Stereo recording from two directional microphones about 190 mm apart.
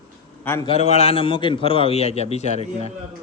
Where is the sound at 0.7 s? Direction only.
35° left (ahead or behind).